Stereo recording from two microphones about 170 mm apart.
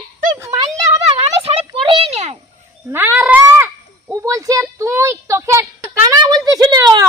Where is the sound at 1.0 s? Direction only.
35° right (ahead or behind).